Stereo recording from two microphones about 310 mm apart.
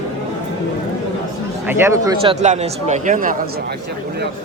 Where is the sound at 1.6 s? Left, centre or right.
Centre.